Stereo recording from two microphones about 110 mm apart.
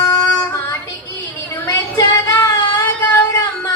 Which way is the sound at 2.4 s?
20° left (ahead or behind).